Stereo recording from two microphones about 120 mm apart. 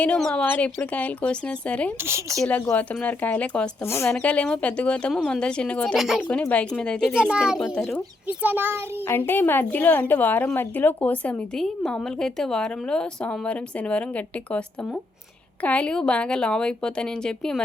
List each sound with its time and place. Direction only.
0.0 s a woman's voice: 5° left (ahead or behind)
2.0 s speech: 20° right (ahead or behind)
2.3 s a child's voice: 5° left (ahead or behind)
2.6 s a woman's voice: 15° left (ahead or behind)
3.8 s a woman's voice: 20° left (ahead or behind)
4.1 s a woman's voice: 10° left (ahead or behind)
6.5 s a woman's voice: 10° left (ahead or behind)
7.2 s a child's voice: 5° right (ahead or behind)
7.6 s a child's voice: 5° left (ahead or behind)
8.4 s a child's voice: 15° right (ahead or behind)
9.0 s a woman's voice: 20° left (ahead or behind)